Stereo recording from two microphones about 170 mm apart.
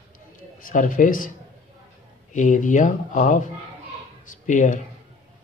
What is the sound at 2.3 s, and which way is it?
Speech, 50° left (ahead or behind).